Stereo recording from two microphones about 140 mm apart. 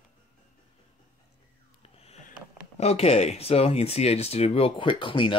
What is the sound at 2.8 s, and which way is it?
Speech, 50° left (ahead or behind).